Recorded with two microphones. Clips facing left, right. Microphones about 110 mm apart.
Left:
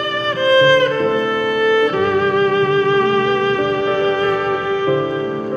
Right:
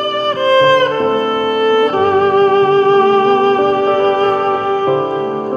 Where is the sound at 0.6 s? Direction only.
35° right (ahead or behind).